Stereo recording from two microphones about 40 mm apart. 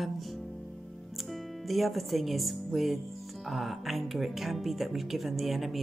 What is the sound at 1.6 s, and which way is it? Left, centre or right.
Speech, centre.